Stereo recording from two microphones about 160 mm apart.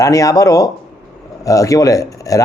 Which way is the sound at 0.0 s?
20° left (ahead or behind).